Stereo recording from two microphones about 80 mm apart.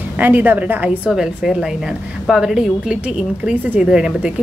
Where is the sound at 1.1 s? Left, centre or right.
Centre.